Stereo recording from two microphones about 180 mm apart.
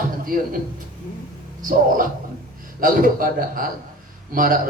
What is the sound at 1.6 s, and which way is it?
A man's voice, 50° right (ahead or behind).